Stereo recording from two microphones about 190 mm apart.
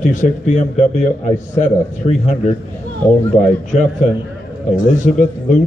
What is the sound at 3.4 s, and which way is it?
A man's voice, 40° left (ahead or behind).